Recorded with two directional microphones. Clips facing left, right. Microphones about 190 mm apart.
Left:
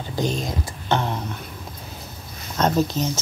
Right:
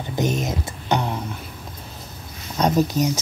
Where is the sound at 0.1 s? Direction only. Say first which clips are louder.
Right 2 dB; 20° right (ahead or behind).